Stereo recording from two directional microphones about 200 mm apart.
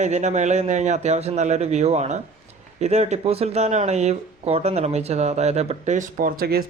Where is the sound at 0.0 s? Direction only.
35° right (ahead or behind).